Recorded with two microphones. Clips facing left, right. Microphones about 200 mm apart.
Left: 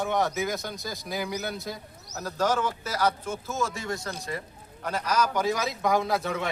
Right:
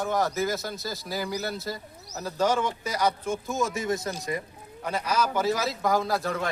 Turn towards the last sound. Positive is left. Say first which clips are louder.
# even
turn(degrees=0)  # may be behind; listen again after turning